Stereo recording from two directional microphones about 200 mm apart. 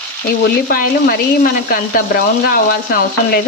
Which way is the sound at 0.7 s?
50° left (ahead or behind).